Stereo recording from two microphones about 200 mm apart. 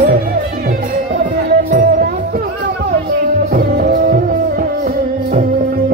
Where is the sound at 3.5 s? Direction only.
50° right (ahead or behind).